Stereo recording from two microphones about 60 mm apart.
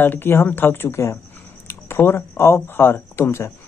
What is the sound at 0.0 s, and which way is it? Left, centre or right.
Speech, left.